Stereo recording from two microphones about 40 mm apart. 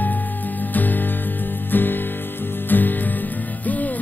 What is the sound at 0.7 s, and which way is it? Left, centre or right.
Music, left.